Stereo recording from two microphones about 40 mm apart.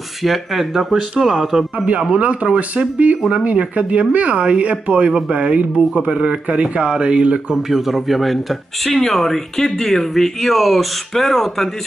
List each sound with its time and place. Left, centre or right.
0.2 s speech: centre
2.1 s speech: right
7.5 s speech: centre